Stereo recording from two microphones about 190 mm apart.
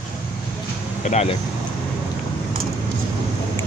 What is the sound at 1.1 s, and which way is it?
Speech, 35° left (ahead or behind).